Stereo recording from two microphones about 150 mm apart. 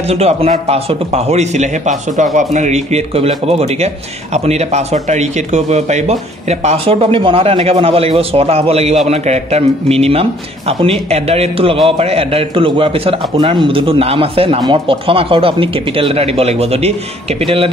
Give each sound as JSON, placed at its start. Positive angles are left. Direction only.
{"t": 0.0, "sound": "a man's voice", "side_deg": -45}